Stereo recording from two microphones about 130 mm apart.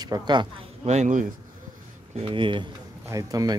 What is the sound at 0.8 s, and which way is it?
Speech, 65° right (ahead or behind).